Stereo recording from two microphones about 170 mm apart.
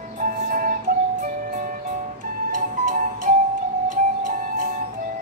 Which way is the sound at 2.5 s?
55° right (ahead or behind).